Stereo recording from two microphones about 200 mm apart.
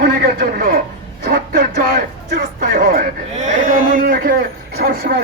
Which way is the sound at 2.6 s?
45° right (ahead or behind).